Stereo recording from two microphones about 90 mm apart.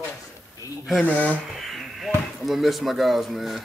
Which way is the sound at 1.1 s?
20° left (ahead or behind).